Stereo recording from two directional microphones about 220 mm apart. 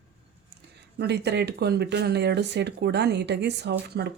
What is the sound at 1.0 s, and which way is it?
Speech, 50° right (ahead or behind).